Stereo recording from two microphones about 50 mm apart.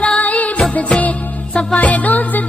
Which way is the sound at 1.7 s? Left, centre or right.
Left.